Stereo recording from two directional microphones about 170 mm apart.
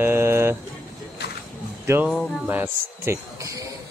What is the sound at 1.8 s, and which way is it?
Speech, 15° right (ahead or behind).